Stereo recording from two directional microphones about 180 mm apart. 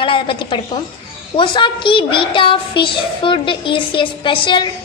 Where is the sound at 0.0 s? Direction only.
30° left (ahead or behind).